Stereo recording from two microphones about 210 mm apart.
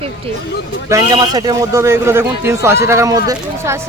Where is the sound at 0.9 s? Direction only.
20° right (ahead or behind).